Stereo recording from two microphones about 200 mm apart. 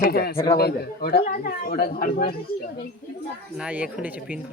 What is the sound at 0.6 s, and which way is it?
Speech, 50° left (ahead or behind).